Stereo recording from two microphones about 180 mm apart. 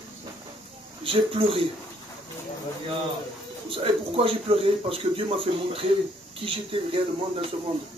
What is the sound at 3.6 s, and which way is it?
Speech, 30° right (ahead or behind).